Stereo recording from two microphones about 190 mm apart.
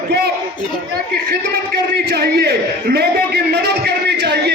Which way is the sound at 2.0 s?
55° right (ahead or behind).